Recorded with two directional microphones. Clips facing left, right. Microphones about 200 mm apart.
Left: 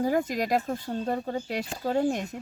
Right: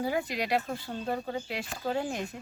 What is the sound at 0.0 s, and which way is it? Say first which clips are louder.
Speech: left 5 dB; 45° left (ahead or behind).